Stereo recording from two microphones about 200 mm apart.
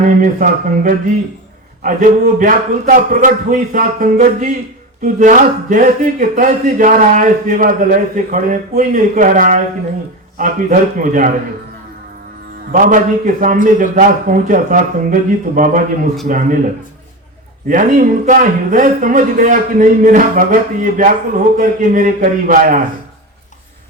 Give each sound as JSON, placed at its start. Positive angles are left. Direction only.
{"t": 0.2, "sound": "a man's voice", "side_deg": -40}
{"t": 12.7, "sound": "a man's voice", "side_deg": -40}
{"t": 17.7, "sound": "a man's voice", "side_deg": -40}